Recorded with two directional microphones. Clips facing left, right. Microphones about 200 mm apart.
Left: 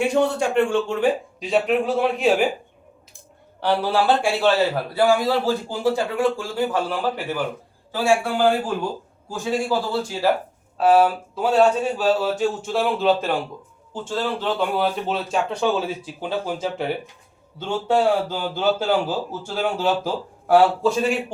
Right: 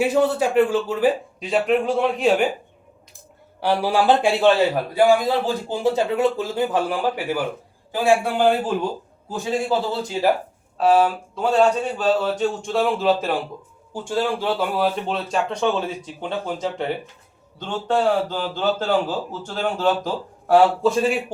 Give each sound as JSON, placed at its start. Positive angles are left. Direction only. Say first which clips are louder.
{"t": 0.0, "sound": "speech", "louder": "right 1 dB", "side_deg": -5}
{"t": 3.6, "sound": "a man's voice", "louder": "right 1 dB", "side_deg": -10}
{"t": 10.8, "sound": "speech", "louder": "left 1 dB", "side_deg": 5}
{"t": 13.9, "sound": "a man's voice", "louder": "right 2 dB", "side_deg": -15}